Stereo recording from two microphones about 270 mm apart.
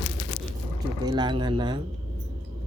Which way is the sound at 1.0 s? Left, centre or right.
Centre.